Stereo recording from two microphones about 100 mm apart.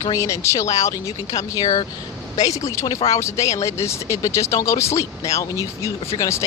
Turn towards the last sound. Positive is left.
turn(degrees=30)  # may be behind; listen again after turning